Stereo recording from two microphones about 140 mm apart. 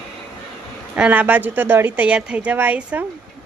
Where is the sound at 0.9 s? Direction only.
10° right (ahead or behind).